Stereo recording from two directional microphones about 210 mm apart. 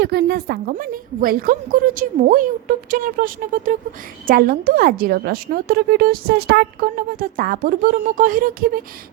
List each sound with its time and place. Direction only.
0.0 s a woman's voice: 50° right (ahead or behind)